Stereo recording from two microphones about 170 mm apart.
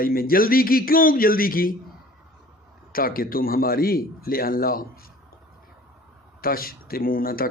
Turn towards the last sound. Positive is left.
turn(degrees=60)  # may be behind; listen again after turning